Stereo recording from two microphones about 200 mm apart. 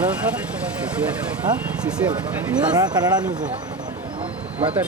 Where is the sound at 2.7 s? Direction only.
20° right (ahead or behind).